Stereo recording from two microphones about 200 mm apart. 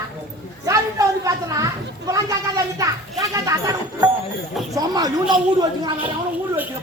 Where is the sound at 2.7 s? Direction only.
15° right (ahead or behind).